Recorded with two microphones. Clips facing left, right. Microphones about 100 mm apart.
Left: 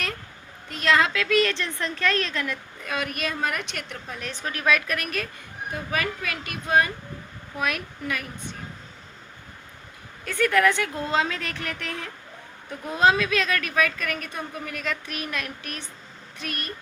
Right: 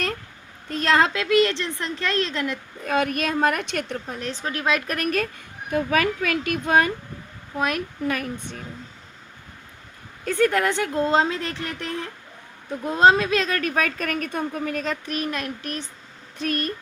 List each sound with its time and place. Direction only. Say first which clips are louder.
0.7 s a woman's voice: right 2 dB; 35° right (ahead or behind)
2.8 s speech: right 6 dB; 45° right (ahead or behind)
4.1 s a woman's voice: even; 30° right (ahead or behind)
4.9 s speech: right 5 dB; 40° right (ahead or behind)
7.5 s a woman's voice: right 4 dB; 30° right (ahead or behind)
10.2 s a woman's voice: right 1 dB; 35° right (ahead or behind)